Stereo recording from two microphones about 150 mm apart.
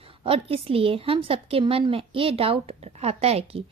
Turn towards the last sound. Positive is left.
turn(degrees=-45)  # may be behind; listen again after turning